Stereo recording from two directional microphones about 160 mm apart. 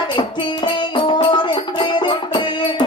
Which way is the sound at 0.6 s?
30° left (ahead or behind).